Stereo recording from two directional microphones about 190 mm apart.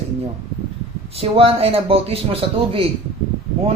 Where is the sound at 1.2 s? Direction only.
30° right (ahead or behind).